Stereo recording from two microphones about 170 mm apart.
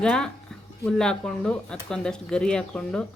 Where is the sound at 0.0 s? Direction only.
5° left (ahead or behind).